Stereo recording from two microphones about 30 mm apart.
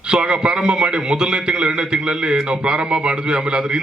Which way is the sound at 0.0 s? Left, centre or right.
Right.